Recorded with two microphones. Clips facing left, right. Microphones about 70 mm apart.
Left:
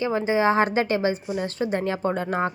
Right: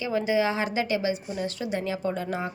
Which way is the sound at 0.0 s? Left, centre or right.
Left.